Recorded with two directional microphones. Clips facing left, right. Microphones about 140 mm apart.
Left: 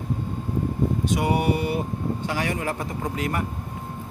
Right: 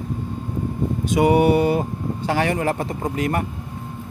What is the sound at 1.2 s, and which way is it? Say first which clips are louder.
Speech: right 10 dB; 90° right.